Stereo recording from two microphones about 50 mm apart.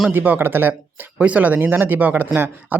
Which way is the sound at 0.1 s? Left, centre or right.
Right.